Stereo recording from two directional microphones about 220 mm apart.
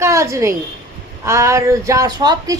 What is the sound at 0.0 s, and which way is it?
A woman's voice, 15° right (ahead or behind).